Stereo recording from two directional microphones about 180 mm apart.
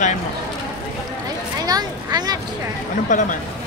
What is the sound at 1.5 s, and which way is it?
Speech, 20° right (ahead or behind).